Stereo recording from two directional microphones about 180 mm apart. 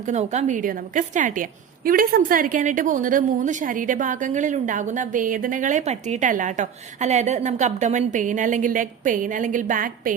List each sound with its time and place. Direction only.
0.0 s a woman's voice: 40° right (ahead or behind)